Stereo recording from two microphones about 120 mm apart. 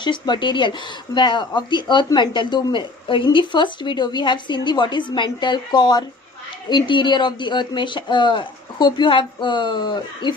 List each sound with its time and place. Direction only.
0.0 s a woman's voice: 40° left (ahead or behind)